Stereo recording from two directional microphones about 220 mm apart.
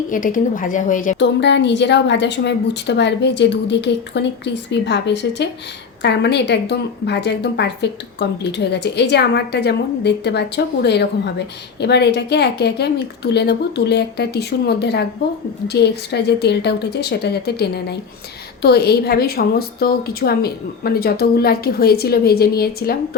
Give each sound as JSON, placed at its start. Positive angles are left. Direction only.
{"t": 0.1, "sound": "a woman's voice", "side_deg": 35}
{"t": 1.2, "sound": "a woman's voice", "side_deg": 50}